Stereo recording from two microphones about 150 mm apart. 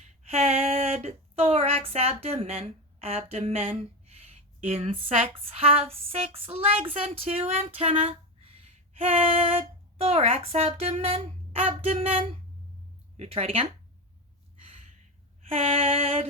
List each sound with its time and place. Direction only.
0.3 s a sound: 45° right (ahead or behind)
5.4 s speech: 40° right (ahead or behind)
15.4 s speech: 40° right (ahead or behind)